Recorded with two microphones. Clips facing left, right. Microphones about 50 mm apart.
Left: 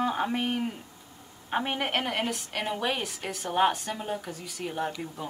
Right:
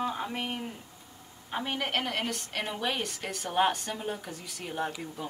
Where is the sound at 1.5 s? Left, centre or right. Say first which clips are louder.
Left 4 dB; left.